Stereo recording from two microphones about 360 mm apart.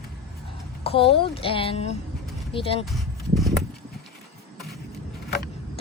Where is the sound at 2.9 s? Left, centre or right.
Centre.